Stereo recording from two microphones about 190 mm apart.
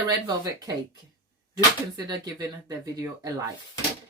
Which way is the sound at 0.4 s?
20° right (ahead or behind).